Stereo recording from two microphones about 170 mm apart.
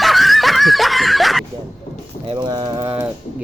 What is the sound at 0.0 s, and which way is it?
Snicker, centre (ahead or behind).